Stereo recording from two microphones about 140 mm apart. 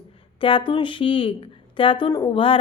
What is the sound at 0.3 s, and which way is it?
A woman's voice, 40° left (ahead or behind).